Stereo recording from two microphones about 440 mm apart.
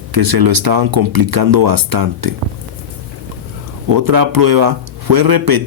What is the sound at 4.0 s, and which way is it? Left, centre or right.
Speech, right.